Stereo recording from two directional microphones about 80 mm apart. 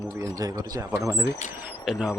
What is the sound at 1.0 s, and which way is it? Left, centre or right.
Speech, right.